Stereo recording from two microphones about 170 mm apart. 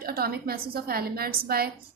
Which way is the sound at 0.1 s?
65° right (ahead or behind).